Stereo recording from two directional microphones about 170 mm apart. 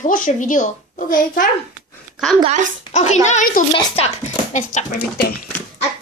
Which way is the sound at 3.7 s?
35° left (ahead or behind).